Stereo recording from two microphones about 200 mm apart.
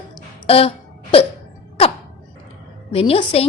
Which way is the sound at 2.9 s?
25° left (ahead or behind).